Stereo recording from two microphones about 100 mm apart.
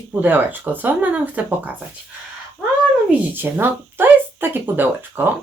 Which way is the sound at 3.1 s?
20° right (ahead or behind).